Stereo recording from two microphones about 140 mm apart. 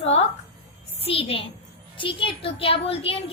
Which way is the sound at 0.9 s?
40° left (ahead or behind).